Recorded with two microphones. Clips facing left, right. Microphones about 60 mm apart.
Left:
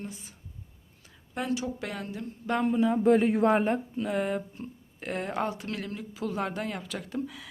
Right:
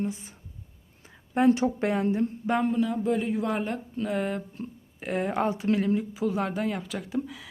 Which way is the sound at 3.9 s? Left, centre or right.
Centre.